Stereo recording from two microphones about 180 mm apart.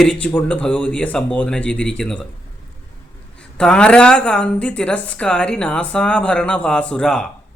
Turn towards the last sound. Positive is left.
turn(degrees=5)  # may be behind; listen again after turning